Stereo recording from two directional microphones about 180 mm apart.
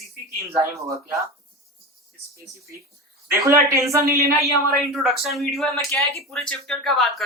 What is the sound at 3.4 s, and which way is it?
Speech, 15° right (ahead or behind).